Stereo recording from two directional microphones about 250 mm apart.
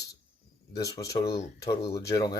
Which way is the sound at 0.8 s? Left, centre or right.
Centre.